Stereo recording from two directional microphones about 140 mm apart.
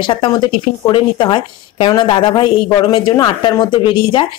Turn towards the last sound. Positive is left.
turn(degrees=35)  # may be behind; listen again after turning